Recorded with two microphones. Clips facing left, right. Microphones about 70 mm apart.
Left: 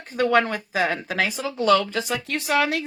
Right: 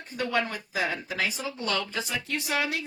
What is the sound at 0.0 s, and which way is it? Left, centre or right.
Speech, left.